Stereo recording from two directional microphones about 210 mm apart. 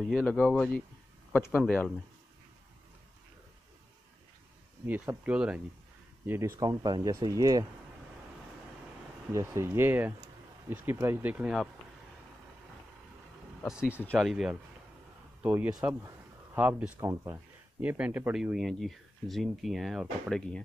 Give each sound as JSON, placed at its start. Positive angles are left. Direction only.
{"t": 0.0, "sound": "speech", "side_deg": 5}
{"t": 4.8, "sound": "speech", "side_deg": -10}
{"t": 9.3, "sound": "speech", "side_deg": -15}
{"t": 13.7, "sound": "speech", "side_deg": -5}